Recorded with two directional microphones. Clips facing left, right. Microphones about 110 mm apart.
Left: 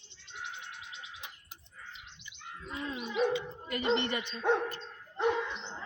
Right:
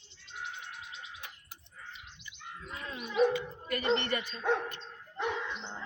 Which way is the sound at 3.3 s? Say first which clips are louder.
Even; 20° left (ahead or behind).